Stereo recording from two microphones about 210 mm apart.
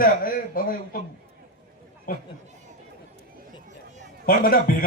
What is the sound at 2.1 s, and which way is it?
Speech, 40° left (ahead or behind).